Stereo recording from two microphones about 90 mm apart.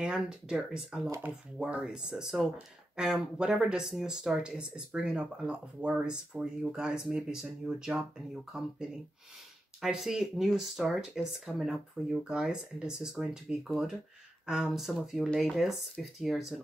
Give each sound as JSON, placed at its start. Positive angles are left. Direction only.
{"t": 0.0, "sound": "speech", "side_deg": -10}
{"t": 9.8, "sound": "speech", "side_deg": -5}